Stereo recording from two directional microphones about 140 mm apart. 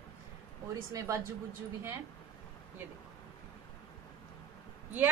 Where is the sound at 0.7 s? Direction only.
25° right (ahead or behind).